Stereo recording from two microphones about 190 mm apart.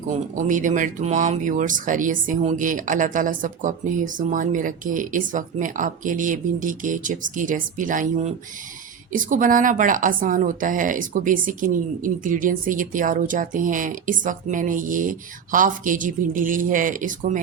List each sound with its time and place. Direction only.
0.3 s speech: 40° right (ahead or behind)